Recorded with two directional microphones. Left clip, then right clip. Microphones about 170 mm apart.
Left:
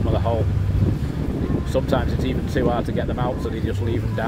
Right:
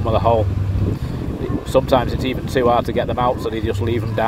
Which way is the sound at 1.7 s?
20° right (ahead or behind).